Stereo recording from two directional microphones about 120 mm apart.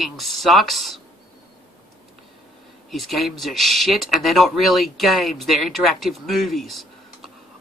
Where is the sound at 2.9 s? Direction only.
Centre (ahead or behind).